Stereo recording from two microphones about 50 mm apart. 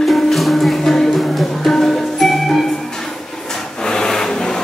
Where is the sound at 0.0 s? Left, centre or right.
Centre.